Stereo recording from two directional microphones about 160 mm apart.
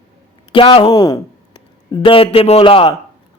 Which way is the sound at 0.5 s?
35° left (ahead or behind).